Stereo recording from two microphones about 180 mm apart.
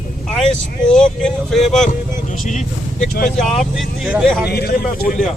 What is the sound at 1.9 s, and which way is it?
Speech, 50° left (ahead or behind).